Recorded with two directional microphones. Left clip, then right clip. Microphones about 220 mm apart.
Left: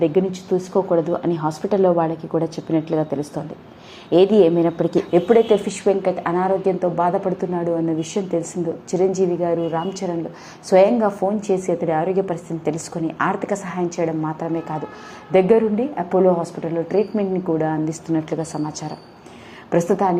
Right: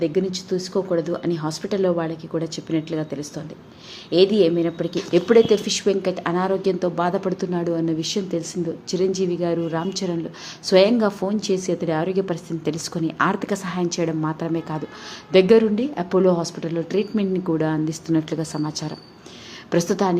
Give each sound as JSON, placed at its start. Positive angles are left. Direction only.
{"t": 0.0, "sound": "a woman's voice", "side_deg": -5}
{"t": 4.9, "sound": "a woman's voice", "side_deg": -20}